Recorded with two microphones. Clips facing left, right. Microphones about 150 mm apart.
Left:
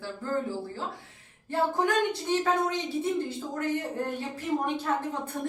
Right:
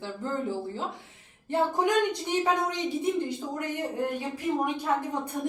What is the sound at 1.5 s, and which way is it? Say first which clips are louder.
A woman's voice: right 1 dB; 15° right (ahead or behind).